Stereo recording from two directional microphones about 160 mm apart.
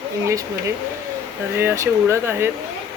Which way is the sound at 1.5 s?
15° right (ahead or behind).